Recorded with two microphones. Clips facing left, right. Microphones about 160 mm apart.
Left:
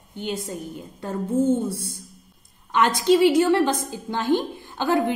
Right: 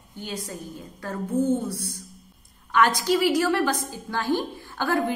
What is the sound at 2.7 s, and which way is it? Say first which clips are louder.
A woman's voice: left 3 dB; 25° left (ahead or behind).